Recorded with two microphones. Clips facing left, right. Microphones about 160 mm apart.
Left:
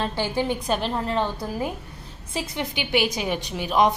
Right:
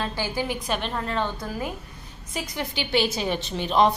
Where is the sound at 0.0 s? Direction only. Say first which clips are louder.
Left 3 dB; 25° left (ahead or behind).